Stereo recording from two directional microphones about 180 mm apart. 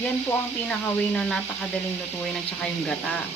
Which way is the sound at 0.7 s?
5° left (ahead or behind).